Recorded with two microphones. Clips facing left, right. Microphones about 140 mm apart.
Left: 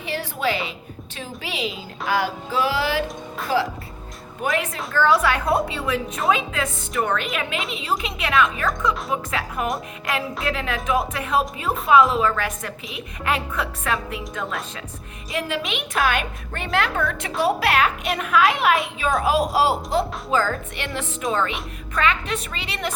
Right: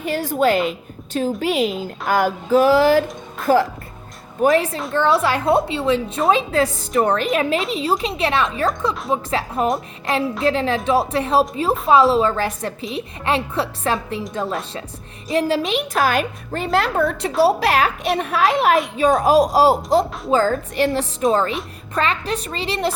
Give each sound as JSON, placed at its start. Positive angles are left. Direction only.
{"t": 0.0, "sound": "a woman's voice", "side_deg": -45}
{"t": 4.5, "sound": "a woman's voice", "side_deg": -35}